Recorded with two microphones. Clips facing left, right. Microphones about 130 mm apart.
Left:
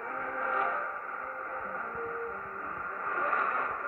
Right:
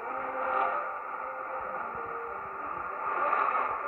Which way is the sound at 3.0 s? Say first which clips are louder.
Right 3 dB; 30° right (ahead or behind).